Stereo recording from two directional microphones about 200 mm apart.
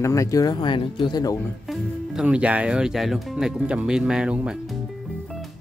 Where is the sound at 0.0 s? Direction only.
15° left (ahead or behind).